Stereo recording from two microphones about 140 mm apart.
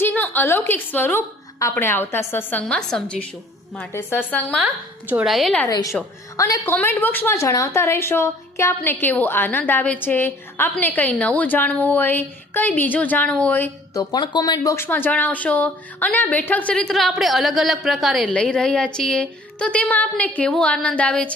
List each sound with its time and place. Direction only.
0.0 s a woman's voice: 15° left (ahead or behind)
5.6 s a woman's voice: 25° left (ahead or behind)
6.7 s a woman's voice: 15° left (ahead or behind)
13.9 s a woman's voice: 25° left (ahead or behind); by 21.3 s 10° left (ahead or behind)